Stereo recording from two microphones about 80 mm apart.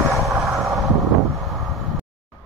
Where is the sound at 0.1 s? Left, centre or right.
Centre.